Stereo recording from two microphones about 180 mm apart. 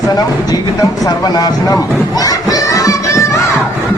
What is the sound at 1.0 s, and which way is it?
Speech, 20° left (ahead or behind).